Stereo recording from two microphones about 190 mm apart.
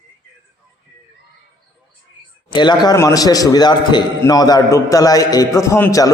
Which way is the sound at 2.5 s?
25° left (ahead or behind).